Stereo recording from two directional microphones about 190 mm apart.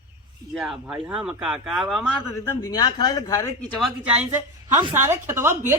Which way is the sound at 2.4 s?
15° left (ahead or behind).